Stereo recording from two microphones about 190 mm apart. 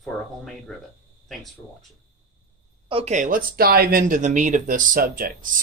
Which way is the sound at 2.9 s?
35° right (ahead or behind).